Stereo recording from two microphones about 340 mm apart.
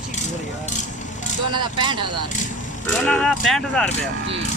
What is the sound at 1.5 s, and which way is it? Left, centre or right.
Speech, centre.